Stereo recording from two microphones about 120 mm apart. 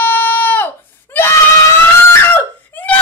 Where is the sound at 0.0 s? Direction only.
20° left (ahead or behind).